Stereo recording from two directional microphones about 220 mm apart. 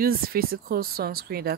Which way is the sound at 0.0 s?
45° right (ahead or behind).